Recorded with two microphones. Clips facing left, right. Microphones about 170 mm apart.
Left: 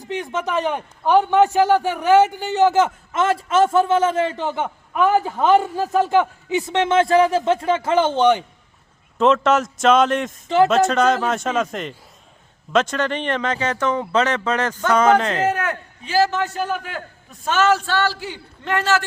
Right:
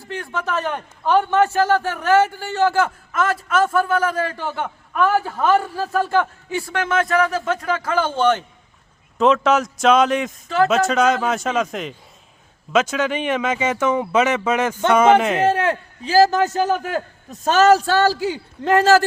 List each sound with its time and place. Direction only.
0.0 s a man's voice: 20° left (ahead or behind)
9.1 s speech: centre (ahead or behind)
15.4 s a man's voice: 30° right (ahead or behind)